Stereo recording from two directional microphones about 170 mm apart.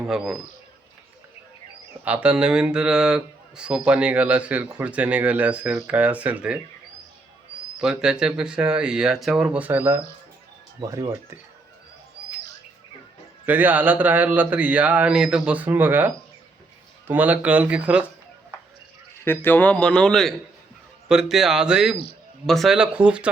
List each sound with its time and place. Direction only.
0.0 s speech: 5° right (ahead or behind)
2.0 s a man's voice: 5° right (ahead or behind)
7.8 s speech: 5° right (ahead or behind)
13.4 s a man's voice: 10° right (ahead or behind)
19.2 s speech: 15° left (ahead or behind); by 23.3 s 5° right (ahead or behind)